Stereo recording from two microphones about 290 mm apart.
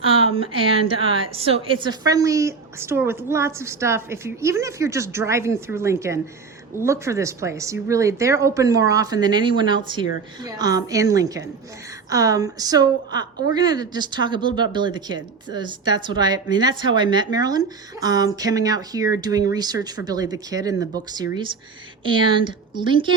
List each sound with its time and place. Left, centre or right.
0.0 s a woman's voice: centre